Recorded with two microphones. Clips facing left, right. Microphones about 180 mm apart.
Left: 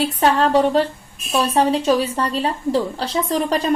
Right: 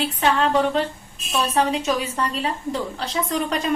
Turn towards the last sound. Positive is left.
turn(degrees=35)  # may be behind; listen again after turning